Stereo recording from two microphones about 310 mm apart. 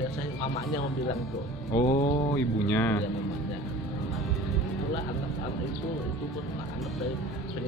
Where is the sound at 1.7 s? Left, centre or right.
Centre.